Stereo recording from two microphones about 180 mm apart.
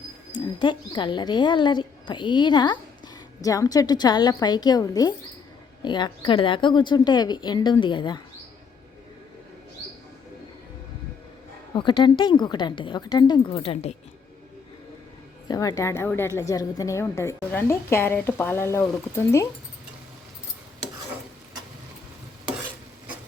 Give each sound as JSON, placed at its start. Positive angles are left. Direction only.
{"t": 0.3, "sound": "a woman's voice", "side_deg": 25}
{"t": 11.7, "sound": "a woman's voice", "side_deg": 25}
{"t": 15.4, "sound": "a woman's voice", "side_deg": 20}